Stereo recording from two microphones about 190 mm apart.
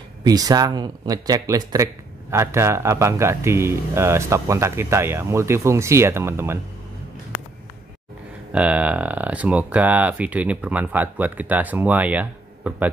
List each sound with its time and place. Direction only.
0.2 s speech: 20° right (ahead or behind)
8.5 s speech: 5° right (ahead or behind)